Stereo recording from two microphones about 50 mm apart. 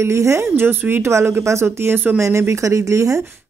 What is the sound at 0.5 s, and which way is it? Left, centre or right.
Speech, right.